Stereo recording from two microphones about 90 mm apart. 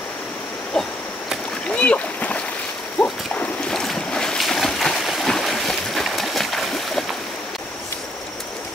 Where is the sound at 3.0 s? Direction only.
15° left (ahead or behind).